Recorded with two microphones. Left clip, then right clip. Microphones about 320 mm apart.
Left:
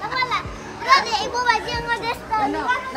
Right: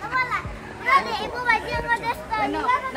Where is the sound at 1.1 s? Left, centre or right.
Left.